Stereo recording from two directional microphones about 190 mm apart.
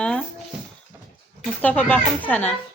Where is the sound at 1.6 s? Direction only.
10° left (ahead or behind).